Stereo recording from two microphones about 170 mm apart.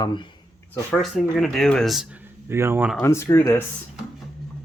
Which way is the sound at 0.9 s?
Centre (ahead or behind).